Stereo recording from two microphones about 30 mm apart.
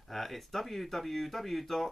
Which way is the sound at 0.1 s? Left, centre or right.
Centre.